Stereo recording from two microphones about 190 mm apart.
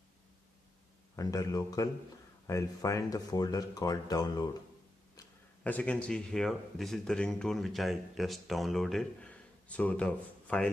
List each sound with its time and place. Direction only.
1.1 s speech: 20° left (ahead or behind)
5.6 s speech: 5° left (ahead or behind)